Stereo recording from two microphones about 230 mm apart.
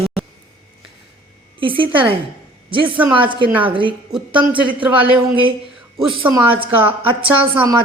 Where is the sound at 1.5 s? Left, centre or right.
Right.